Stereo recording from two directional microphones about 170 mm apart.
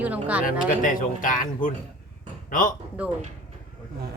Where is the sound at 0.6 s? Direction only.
50° left (ahead or behind).